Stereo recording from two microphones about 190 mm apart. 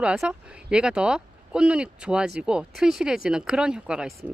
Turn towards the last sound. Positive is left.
turn(degrees=-5)  # may be behind; listen again after turning